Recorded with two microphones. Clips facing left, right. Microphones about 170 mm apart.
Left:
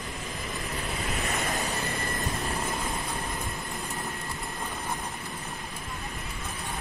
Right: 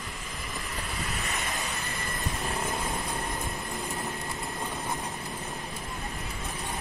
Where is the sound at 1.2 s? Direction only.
40° left (ahead or behind).